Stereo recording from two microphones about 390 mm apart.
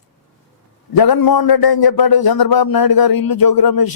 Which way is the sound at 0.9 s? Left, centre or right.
Left.